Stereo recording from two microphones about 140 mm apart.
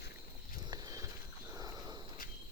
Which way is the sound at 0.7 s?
20° right (ahead or behind).